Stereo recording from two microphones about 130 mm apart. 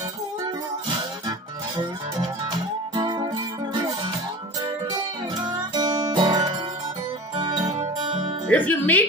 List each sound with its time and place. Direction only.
4.9 s music: 30° right (ahead or behind)
8.5 s speech: 10° left (ahead or behind)